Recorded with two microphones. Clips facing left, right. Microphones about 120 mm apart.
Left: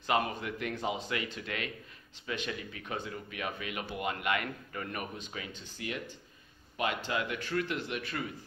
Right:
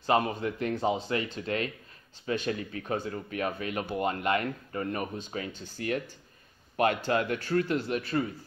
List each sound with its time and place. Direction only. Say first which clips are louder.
0.0 s speech: right 5 dB; 35° right (ahead or behind)
7.1 s speech: right 6 dB; 45° right (ahead or behind)